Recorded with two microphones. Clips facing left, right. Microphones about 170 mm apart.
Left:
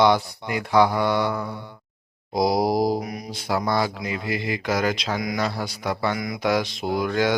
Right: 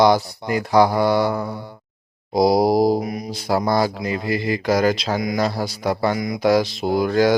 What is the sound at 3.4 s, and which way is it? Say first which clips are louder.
Mantra: right 4 dB; 40° right (ahead or behind).